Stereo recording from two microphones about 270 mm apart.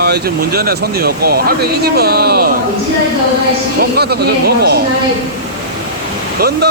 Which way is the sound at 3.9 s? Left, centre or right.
Right.